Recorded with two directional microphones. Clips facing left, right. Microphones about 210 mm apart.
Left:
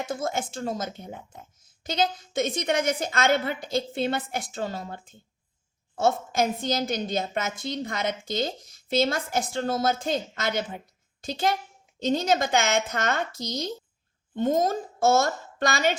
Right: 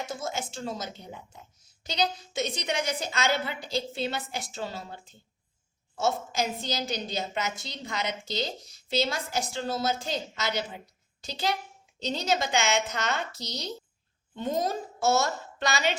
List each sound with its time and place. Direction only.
0.1 s a woman's voice: 50° left (ahead or behind)
6.0 s a woman's voice: 50° left (ahead or behind)